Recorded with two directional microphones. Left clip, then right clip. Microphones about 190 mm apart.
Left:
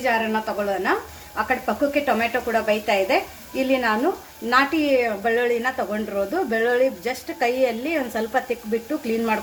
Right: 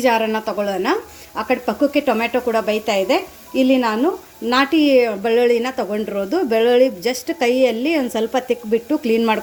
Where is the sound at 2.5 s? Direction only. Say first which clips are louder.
Even; 45° right (ahead or behind).